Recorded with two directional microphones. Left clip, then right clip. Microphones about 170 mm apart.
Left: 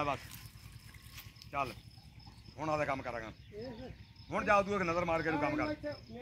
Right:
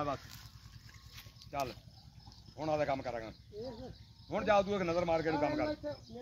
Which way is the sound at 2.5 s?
40° right (ahead or behind).